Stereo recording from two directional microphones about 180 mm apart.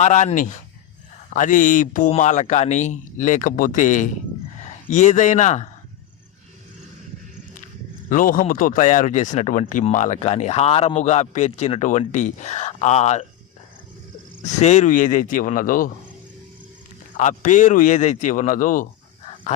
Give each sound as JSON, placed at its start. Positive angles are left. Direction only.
{"t": 0.0, "sound": "a man's voice", "side_deg": 40}
{"t": 8.1, "sound": "speech", "side_deg": 50}
{"t": 14.4, "sound": "speech", "side_deg": 40}
{"t": 17.2, "sound": "speech", "side_deg": 45}